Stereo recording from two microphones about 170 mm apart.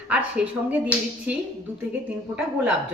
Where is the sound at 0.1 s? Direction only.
5° right (ahead or behind).